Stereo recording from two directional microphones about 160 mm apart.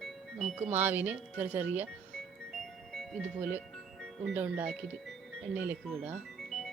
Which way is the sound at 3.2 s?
10° right (ahead or behind).